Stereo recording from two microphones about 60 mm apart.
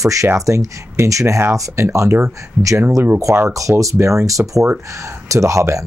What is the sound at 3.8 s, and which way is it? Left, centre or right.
Speech, right.